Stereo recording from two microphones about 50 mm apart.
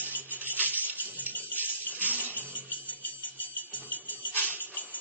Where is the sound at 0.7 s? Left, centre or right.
Right.